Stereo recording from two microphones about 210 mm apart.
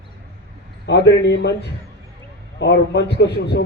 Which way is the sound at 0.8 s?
55° left (ahead or behind).